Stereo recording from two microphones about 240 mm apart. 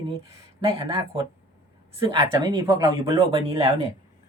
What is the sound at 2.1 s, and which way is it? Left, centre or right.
Speech, centre.